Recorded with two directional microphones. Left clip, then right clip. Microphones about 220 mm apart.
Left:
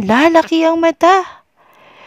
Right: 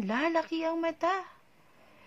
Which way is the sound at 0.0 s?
50° left (ahead or behind).